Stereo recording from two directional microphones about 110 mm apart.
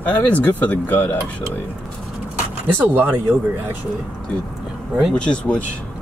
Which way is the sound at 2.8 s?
15° right (ahead or behind).